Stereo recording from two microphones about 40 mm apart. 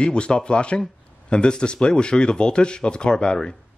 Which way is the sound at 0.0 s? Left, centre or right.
Left.